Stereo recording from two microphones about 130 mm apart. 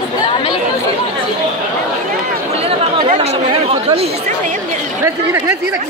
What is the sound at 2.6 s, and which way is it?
Speech, 55° right (ahead or behind).